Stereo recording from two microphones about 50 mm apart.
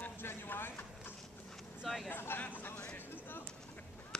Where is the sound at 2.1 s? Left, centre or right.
Left.